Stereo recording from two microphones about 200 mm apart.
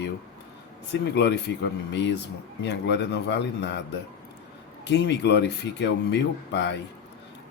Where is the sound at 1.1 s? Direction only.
55° left (ahead or behind).